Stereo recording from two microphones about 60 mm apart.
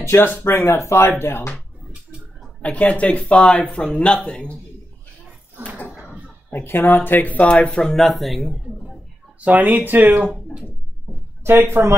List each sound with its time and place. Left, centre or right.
0.0 s speech: left
1.2 s speech: left
2.6 s speech: left
6.5 s speech: left
7.5 s speech: centre
9.4 s speech: right
11.4 s speech: right